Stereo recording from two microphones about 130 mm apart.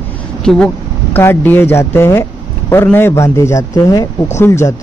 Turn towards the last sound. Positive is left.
turn(degrees=20)  # may be behind; listen again after turning